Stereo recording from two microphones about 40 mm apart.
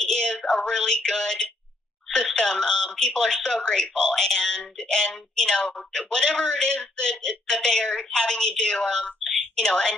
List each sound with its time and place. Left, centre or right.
0.0 s speech: centre